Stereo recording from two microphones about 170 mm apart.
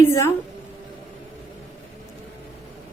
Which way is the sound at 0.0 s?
15° left (ahead or behind).